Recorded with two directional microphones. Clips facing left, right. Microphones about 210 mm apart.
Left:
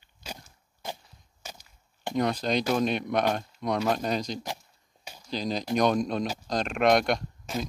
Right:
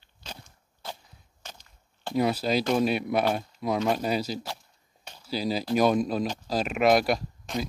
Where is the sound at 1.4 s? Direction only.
10° left (ahead or behind).